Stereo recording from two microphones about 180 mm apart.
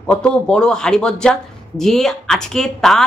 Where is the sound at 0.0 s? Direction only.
5° left (ahead or behind).